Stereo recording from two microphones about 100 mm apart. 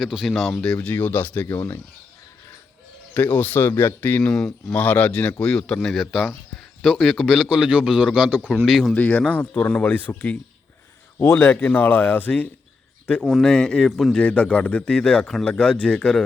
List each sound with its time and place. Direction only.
0.0 s a man's voice: 5° right (ahead or behind); by 1.8 s 25° left (ahead or behind)
3.2 s speech: 20° left (ahead or behind)
4.3 s a man's voice: 5° left (ahead or behind)
9.0 s a man's voice: 15° left (ahead or behind)